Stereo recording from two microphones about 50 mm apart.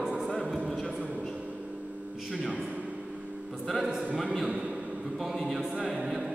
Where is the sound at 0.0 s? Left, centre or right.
Centre.